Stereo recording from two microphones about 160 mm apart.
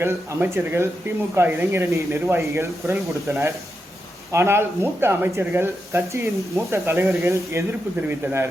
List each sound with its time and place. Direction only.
0.0 s speech: 15° right (ahead or behind)